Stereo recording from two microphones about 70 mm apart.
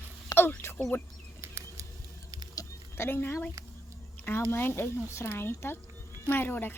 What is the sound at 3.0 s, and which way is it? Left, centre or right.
Speech, left.